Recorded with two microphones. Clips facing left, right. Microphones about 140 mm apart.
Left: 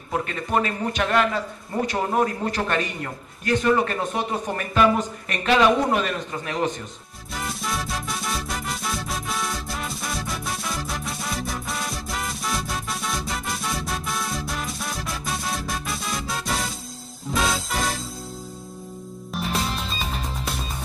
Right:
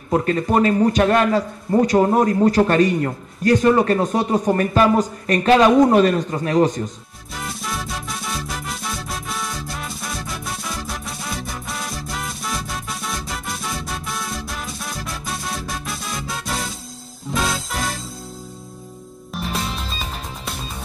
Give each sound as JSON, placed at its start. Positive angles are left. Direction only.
{"t": 0.1, "sound": "a man's voice", "side_deg": -40}
{"t": 7.3, "sound": "music", "side_deg": 0}
{"t": 19.3, "sound": "music", "side_deg": 0}